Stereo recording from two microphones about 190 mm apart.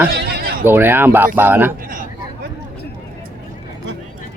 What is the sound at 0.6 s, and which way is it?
Speech, 10° right (ahead or behind).